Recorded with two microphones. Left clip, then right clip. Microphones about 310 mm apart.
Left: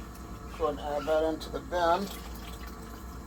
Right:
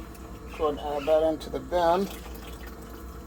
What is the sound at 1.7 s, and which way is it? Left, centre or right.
Speech, right.